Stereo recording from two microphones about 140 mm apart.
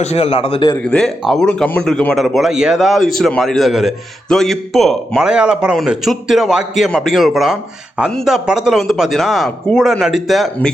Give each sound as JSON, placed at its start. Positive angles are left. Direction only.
{"t": 0.0, "sound": "a man's voice", "side_deg": 45}
{"t": 0.9, "sound": "a man's voice", "side_deg": 5}